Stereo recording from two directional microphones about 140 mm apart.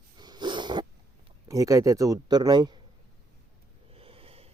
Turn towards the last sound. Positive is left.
turn(degrees=-45)  # may be behind; listen again after turning